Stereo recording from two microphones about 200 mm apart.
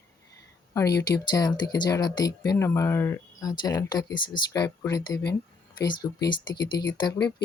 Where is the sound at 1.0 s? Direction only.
20° left (ahead or behind).